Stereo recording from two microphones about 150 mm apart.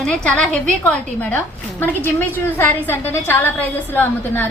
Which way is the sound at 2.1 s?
15° left (ahead or behind).